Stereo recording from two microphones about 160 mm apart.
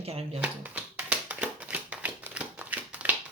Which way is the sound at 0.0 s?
40° right (ahead or behind).